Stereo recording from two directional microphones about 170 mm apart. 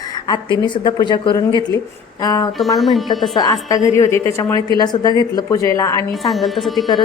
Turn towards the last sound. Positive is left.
turn(degrees=0)  # may be behind; listen again after turning